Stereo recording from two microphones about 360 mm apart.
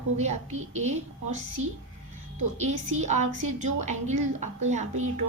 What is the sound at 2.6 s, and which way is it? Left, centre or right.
A woman's voice, centre.